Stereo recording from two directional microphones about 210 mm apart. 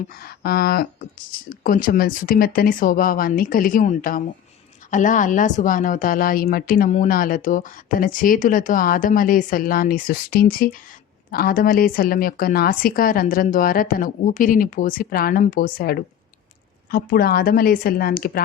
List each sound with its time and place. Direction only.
0.1 s a woman's voice: 45° left (ahead or behind)